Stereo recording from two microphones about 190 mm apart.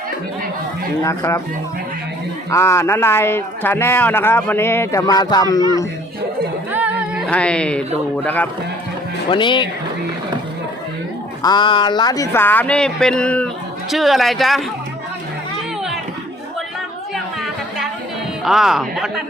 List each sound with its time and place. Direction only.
1.0 s speech: 15° left (ahead or behind)
2.5 s speech: 15° left (ahead or behind)
6.7 s music: 10° right (ahead or behind)
7.3 s speech: 5° left (ahead or behind)
9.3 s speech: 25° left (ahead or behind)
11.4 s speech: 25° left (ahead or behind); by 14.6 s centre (ahead or behind)
18.4 s speech: centre (ahead or behind)